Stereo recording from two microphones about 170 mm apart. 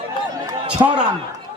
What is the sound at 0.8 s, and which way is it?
Speech, 25° right (ahead or behind).